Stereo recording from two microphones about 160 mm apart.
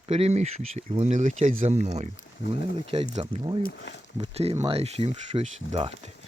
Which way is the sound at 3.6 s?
90° left.